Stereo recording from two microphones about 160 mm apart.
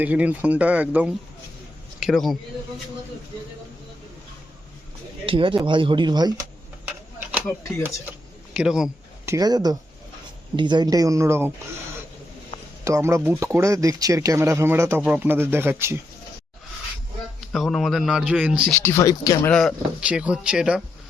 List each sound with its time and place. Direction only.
0.0 s a man's voice: 10° right (ahead or behind)
5.2 s speech: 35° right (ahead or behind)
8.5 s speech: 5° right (ahead or behind)
9.2 s speech: 20° right (ahead or behind)
12.8 s speech: 20° right (ahead or behind)
17.5 s speech: centre (ahead or behind)
18.8 s speech: 15° left (ahead or behind)
19.5 s speech: 5° left (ahead or behind)
20.0 s speech: 5° right (ahead or behind)